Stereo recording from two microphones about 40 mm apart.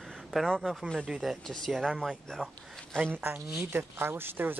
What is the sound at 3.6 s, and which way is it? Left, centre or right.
Speech, right.